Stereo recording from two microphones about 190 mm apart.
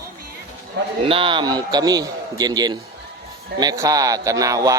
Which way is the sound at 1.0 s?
30° right (ahead or behind).